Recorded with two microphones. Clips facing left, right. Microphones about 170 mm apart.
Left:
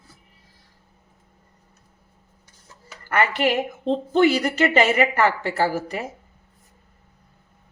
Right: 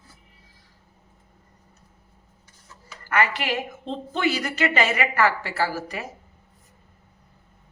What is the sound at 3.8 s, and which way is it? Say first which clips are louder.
Speech: left 9 dB; 35° left (ahead or behind).